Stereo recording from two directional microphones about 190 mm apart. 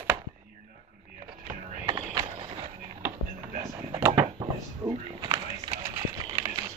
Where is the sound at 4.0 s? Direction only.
15° right (ahead or behind).